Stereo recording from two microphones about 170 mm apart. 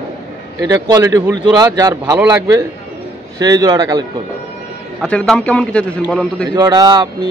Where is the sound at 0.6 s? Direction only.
20° right (ahead or behind).